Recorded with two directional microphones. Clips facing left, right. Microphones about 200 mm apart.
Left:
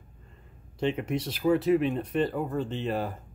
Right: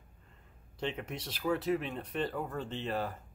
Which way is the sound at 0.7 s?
10° left (ahead or behind).